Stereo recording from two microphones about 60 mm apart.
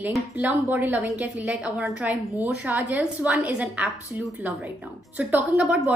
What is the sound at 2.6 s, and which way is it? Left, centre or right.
A woman's voice, right.